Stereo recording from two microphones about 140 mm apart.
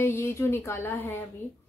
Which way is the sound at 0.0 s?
15° left (ahead or behind).